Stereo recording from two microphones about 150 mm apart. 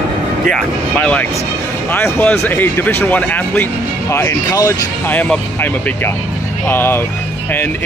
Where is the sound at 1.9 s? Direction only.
15° left (ahead or behind).